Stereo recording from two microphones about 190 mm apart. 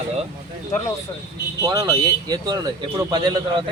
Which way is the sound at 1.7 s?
20° right (ahead or behind).